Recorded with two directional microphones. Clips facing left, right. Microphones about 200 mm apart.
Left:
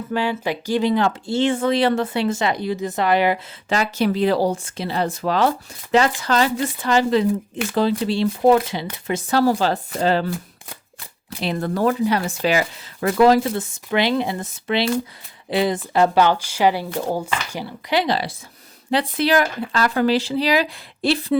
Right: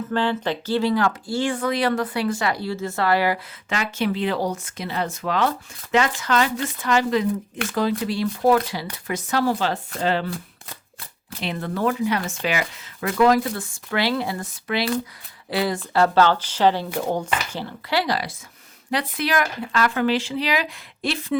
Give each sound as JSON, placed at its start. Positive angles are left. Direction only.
{"t": 0.1, "sound": "speech", "side_deg": 10}
{"t": 3.7, "sound": "speech", "side_deg": 35}
{"t": 11.3, "sound": "speech", "side_deg": 40}